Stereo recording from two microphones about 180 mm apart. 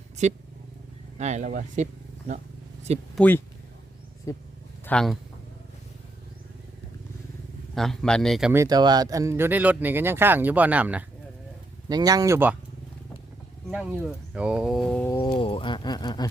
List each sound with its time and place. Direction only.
0.2 s speech: 40° right (ahead or behind)
3.2 s speech: 10° left (ahead or behind)
4.9 s speech: 5° left (ahead or behind)
7.8 s speech: 5° left (ahead or behind)
8.5 s speech: 20° right (ahead or behind)
11.9 s speech: 20° right (ahead or behind)
14.3 s speech: 5° right (ahead or behind)
15.3 s speech: 30° left (ahead or behind)